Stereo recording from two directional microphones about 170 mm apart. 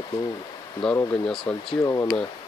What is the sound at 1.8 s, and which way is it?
Speech, 20° left (ahead or behind).